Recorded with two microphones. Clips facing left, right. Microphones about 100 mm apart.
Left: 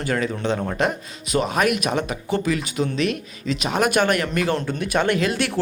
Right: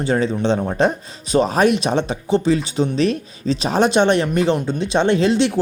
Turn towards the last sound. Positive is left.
turn(degrees=-25)  # may be behind; listen again after turning